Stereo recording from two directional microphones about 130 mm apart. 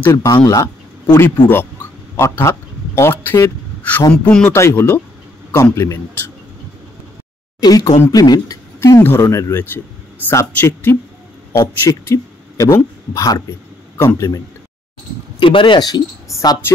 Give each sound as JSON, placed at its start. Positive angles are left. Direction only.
{"t": 0.1, "sound": "a man's voice", "side_deg": 25}
{"t": 4.1, "sound": "a man's voice", "side_deg": 10}
{"t": 7.6, "sound": "a man's voice", "side_deg": 30}
{"t": 15.3, "sound": "speech", "side_deg": 40}
{"t": 16.3, "sound": "speech", "side_deg": 25}